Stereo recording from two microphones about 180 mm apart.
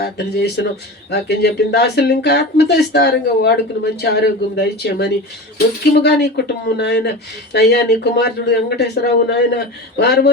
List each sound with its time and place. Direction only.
0.0 s speech: 65° left (ahead or behind)